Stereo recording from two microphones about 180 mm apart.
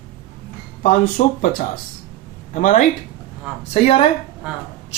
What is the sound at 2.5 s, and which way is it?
Speech, 45° left (ahead or behind).